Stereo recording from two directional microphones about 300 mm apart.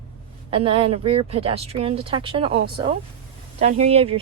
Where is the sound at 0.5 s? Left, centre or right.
Centre.